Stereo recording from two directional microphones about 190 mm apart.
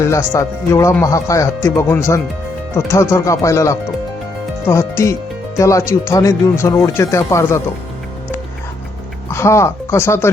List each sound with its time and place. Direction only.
0.0 s speech: 15° left (ahead or behind)
9.3 s speech: 15° left (ahead or behind)